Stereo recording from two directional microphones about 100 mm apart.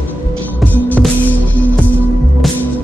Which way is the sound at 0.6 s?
15° left (ahead or behind).